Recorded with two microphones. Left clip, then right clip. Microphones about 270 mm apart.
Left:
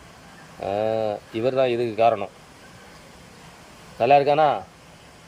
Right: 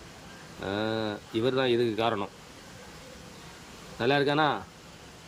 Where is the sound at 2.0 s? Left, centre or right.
Right.